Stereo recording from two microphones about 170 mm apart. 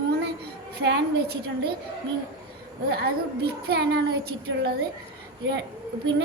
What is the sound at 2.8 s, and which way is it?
Speech, 70° right (ahead or behind).